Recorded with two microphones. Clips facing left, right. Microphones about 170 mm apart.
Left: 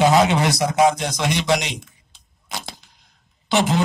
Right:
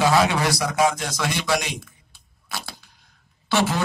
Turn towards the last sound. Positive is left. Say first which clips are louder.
# left 3 dB
turn(degrees=20)  # may be behind; listen again after turning